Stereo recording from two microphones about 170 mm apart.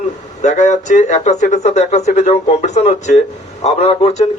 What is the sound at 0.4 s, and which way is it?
A man's voice, 45° left (ahead or behind).